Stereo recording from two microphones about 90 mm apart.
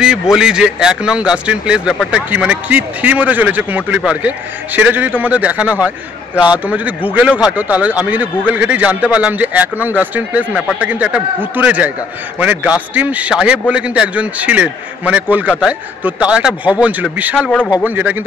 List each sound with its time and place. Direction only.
0.3 s a man's voice: 5° right (ahead or behind)